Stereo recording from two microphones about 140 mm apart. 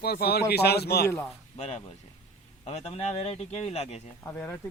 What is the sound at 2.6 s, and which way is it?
Speech, 50° left (ahead or behind).